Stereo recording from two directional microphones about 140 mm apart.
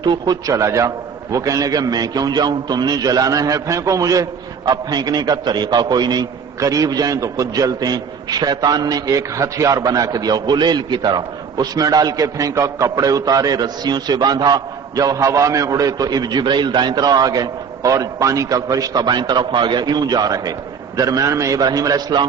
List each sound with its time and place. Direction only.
0.0 s a man's voice: 30° right (ahead or behind)